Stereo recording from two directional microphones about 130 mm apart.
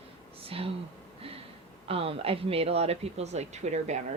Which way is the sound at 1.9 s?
45° right (ahead or behind).